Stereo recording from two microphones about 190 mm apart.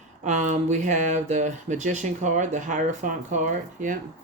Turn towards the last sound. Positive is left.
turn(degrees=-45)  # may be behind; listen again after turning